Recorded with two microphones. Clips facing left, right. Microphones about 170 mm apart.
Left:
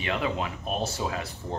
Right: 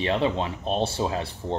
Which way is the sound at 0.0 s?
30° right (ahead or behind).